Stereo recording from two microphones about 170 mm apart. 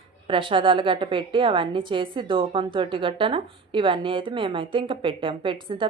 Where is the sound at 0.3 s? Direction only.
30° right (ahead or behind).